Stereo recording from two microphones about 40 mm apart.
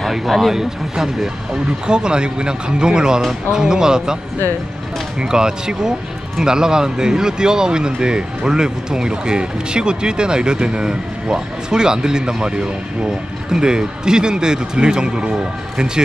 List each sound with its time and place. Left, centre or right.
0.0 s speech: centre
5.2 s speech: centre